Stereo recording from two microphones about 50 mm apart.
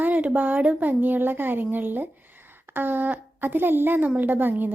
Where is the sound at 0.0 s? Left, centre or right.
Right.